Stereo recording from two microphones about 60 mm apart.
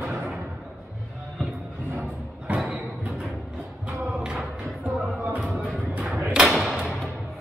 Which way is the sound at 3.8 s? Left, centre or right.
Centre.